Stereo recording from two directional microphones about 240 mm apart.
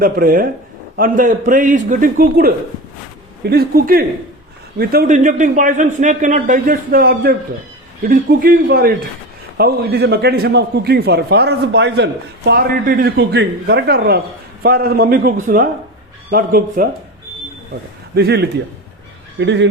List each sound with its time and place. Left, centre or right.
0.0 s a man's voice: right
18.1 s a man's voice: right